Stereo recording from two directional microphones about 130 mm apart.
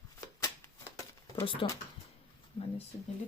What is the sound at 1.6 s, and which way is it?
Speech, 40° left (ahead or behind).